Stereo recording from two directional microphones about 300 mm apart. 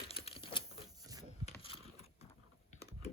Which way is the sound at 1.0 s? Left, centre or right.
Centre.